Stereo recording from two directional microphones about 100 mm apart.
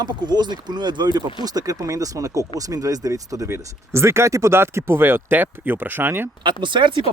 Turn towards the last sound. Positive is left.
turn(degrees=-55)  # may be behind; listen again after turning